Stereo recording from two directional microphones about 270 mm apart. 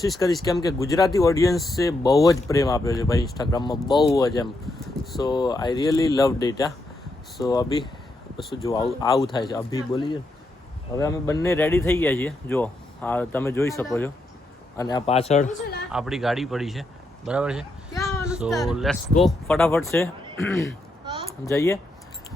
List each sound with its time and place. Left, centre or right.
0.4 s a man's voice: centre
15.9 s speech: centre
18.0 s a sound: centre
18.3 s speech: centre
21.0 s a sound: centre
21.2 s speech: centre